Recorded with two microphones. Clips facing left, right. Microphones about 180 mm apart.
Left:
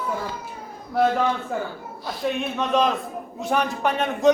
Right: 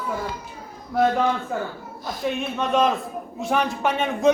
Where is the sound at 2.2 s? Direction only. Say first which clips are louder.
Even; centre (ahead or behind).